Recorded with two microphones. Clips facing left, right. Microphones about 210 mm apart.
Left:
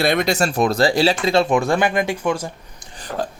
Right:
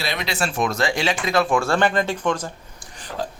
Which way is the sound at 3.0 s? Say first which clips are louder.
Left 4 dB; 45° left (ahead or behind).